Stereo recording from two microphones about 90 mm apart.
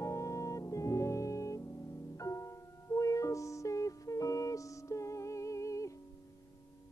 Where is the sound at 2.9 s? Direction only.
35° left (ahead or behind).